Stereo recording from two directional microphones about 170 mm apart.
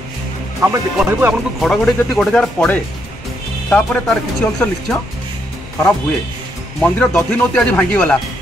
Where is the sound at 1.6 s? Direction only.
Centre (ahead or behind).